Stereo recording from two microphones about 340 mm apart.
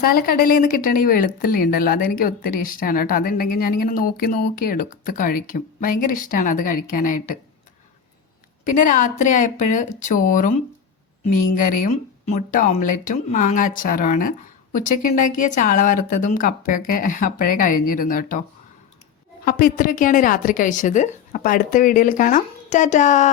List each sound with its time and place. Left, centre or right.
0.0 s speech: left
8.6 s speech: left
19.5 s speech: left